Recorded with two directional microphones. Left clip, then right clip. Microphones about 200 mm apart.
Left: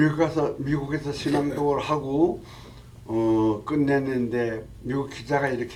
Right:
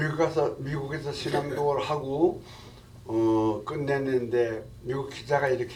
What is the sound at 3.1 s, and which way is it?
Speech, 35° left (ahead or behind).